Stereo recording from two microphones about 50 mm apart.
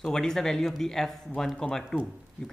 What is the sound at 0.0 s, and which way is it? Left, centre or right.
Speech, centre.